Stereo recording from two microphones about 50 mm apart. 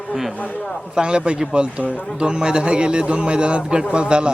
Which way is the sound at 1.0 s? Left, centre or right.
Centre.